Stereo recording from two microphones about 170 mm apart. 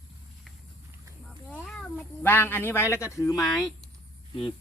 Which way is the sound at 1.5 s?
5° left (ahead or behind).